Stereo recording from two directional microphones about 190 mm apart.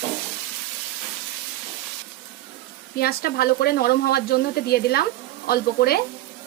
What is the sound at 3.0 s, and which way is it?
Speech, 55° left (ahead or behind).